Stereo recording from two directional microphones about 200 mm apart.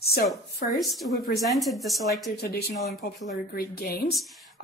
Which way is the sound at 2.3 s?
55° left (ahead or behind).